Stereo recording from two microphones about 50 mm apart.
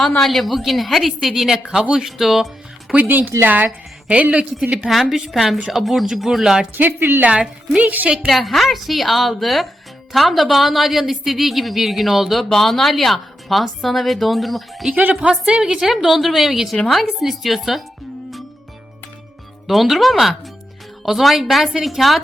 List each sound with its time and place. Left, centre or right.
0.2 s a woman's voice: centre
2.9 s speech: right
4.1 s a woman's voice: right
4.9 s a woman's voice: centre
6.7 s a woman's voice: right
7.2 s a woman's voice: right
8.3 s a woman's voice: centre
15.1 s a woman's voice: centre
19.6 s a woman's voice: centre